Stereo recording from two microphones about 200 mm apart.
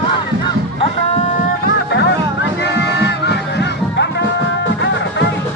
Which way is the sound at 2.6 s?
60° left (ahead or behind).